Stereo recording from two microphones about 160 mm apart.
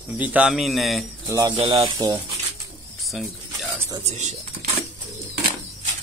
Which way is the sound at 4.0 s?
45° right (ahead or behind).